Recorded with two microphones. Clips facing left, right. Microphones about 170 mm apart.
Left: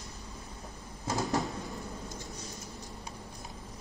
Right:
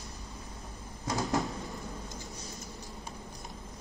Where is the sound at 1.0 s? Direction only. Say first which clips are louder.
Even; centre (ahead or behind).